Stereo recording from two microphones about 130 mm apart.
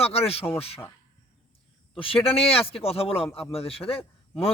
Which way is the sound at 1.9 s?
45° left (ahead or behind).